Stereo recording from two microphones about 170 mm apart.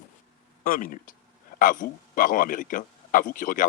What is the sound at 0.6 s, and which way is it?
A man's voice, 55° left (ahead or behind).